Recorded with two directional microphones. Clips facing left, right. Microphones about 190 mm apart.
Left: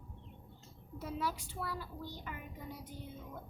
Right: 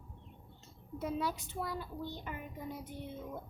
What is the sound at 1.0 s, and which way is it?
A child's voice, 20° right (ahead or behind).